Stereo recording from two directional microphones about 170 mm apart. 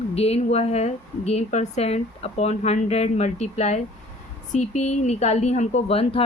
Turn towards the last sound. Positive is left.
turn(degrees=35)  # may be behind; listen again after turning